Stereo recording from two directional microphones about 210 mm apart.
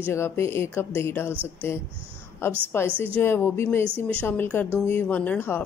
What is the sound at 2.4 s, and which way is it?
Speech, 10° left (ahead or behind).